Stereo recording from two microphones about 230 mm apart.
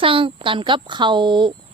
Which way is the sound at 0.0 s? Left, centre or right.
Right.